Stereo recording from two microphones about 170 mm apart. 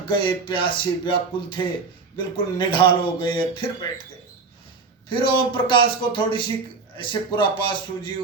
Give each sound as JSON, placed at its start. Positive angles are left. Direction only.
{"t": 0.1, "sound": "a man's voice", "side_deg": 30}
{"t": 5.0, "sound": "a man's voice", "side_deg": 30}